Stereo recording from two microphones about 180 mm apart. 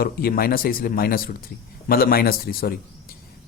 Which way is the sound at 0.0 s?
55° left (ahead or behind).